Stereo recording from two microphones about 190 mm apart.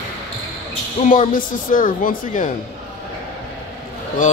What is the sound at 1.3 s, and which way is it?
A woman's voice, 45° left (ahead or behind).